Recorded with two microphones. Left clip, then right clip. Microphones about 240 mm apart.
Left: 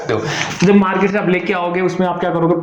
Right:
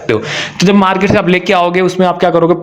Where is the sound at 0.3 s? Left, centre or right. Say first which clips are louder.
Right 2 dB; right.